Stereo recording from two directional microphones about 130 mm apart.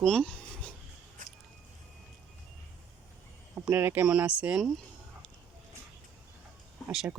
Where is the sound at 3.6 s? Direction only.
15° right (ahead or behind).